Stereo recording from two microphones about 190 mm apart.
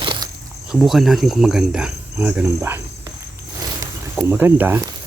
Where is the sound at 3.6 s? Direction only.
15° right (ahead or behind).